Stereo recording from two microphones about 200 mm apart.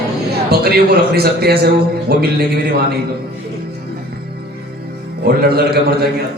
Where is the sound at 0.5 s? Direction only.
50° right (ahead or behind).